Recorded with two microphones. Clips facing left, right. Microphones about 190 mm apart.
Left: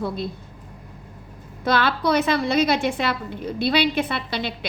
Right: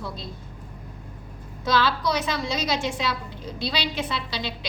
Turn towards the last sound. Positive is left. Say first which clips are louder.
# left 4 dB
turn(degrees=55)  # may be behind; listen again after turning